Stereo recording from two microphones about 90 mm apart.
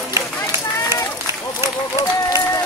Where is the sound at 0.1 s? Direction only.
30° right (ahead or behind).